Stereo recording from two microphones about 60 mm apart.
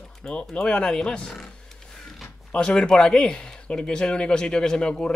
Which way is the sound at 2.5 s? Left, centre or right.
Centre.